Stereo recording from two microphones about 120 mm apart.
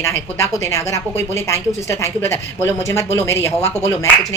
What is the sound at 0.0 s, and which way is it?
A woman's voice, 25° left (ahead or behind).